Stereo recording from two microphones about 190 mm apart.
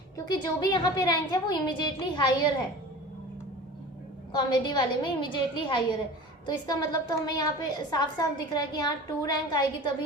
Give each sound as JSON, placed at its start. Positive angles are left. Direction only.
{"t": 0.4, "sound": "a woman's voice", "side_deg": 20}
{"t": 4.3, "sound": "a woman's voice", "side_deg": 25}